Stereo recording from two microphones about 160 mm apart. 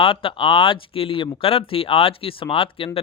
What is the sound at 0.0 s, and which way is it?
Speech, 35° left (ahead or behind).